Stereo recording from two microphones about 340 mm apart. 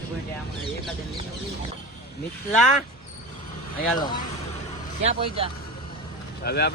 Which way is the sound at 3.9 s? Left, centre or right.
Centre.